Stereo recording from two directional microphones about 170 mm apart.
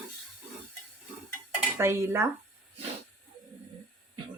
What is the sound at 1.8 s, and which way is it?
Speech, 15° right (ahead or behind).